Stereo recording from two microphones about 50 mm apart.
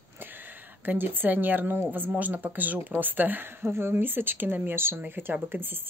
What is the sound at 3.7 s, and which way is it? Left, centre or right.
Speech, right.